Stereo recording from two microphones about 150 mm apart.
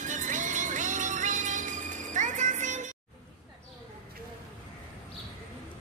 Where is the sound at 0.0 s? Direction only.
55° right (ahead or behind).